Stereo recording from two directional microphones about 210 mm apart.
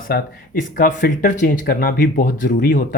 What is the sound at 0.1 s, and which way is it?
Speech, 45° left (ahead or behind).